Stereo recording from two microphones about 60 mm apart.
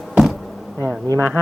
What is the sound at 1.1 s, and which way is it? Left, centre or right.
Speech, left.